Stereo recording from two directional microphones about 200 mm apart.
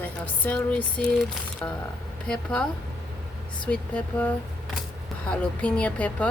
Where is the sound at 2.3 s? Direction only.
5° left (ahead or behind).